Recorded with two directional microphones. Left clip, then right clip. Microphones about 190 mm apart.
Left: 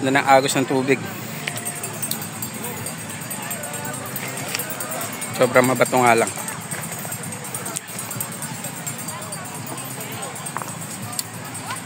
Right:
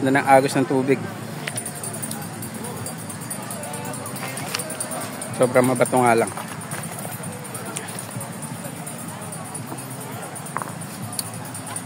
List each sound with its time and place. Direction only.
0.0 s speech: 15° right (ahead or behind)
5.4 s speech: 5° right (ahead or behind)